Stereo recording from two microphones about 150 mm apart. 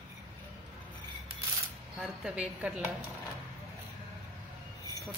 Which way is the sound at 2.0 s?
5° right (ahead or behind).